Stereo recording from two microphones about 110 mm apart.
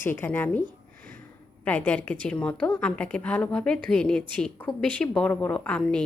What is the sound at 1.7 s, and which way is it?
A woman's voice, 15° left (ahead or behind).